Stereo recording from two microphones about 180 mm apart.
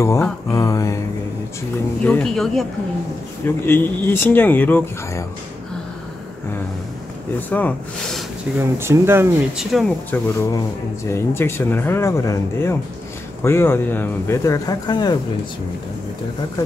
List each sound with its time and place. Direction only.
0.5 s speech: 20° left (ahead or behind)
2.0 s speech: 5° left (ahead or behind)
3.4 s speech: 10° left (ahead or behind)
7.3 s speech: 10° left (ahead or behind)
8.5 s speech: 15° right (ahead or behind)
9.6 s speech: centre (ahead or behind)
10.1 s speech: 15° left (ahead or behind)